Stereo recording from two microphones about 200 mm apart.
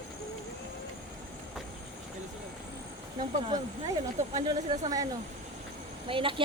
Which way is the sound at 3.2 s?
20° right (ahead or behind).